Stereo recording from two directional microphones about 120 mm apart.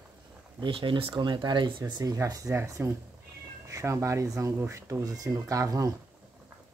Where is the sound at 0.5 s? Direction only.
45° right (ahead or behind); by 5.9 s 30° right (ahead or behind).